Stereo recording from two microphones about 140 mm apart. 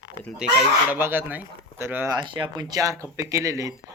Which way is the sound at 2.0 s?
30° right (ahead or behind).